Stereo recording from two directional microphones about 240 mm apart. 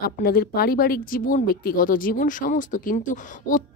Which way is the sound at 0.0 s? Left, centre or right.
Left.